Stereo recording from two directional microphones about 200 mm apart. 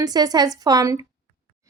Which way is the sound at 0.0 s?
20° right (ahead or behind).